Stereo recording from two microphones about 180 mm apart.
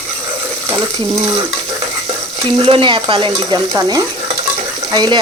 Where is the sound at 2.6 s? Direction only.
30° right (ahead or behind).